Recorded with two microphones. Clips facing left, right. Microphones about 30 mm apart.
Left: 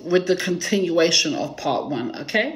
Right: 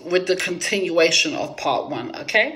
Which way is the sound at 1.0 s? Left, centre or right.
Right.